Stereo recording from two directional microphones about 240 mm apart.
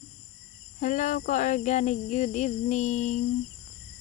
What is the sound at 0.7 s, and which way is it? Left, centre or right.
Cricket, left.